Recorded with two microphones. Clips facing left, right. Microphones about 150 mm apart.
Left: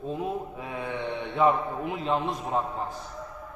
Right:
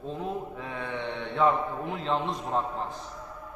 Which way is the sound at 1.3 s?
10° left (ahead or behind).